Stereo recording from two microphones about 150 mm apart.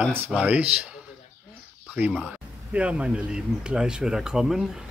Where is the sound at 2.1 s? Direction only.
5° right (ahead or behind).